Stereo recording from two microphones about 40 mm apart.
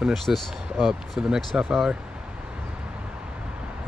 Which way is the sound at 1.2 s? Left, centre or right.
Right.